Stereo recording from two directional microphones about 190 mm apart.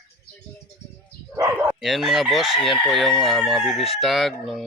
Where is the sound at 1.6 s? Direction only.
Centre (ahead or behind).